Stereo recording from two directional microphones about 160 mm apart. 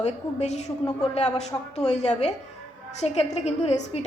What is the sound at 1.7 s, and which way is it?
A woman's voice, 45° left (ahead or behind).